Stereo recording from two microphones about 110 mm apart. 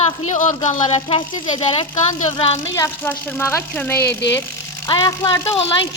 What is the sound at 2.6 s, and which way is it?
Speech, 30° left (ahead or behind).